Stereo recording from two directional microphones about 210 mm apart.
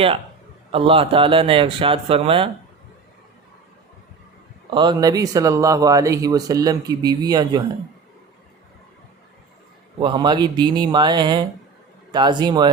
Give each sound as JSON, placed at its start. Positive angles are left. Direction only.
{"t": 0.7, "sound": "a man's voice", "side_deg": -25}
{"t": 4.7, "sound": "speech", "side_deg": -20}
{"t": 10.0, "sound": "a man's voice", "side_deg": -20}